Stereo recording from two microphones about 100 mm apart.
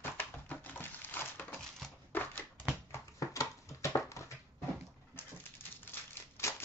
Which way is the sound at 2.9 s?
30° left (ahead or behind).